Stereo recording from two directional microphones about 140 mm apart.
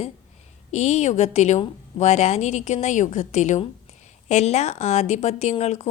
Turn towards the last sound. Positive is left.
turn(degrees=50)  # may be behind; listen again after turning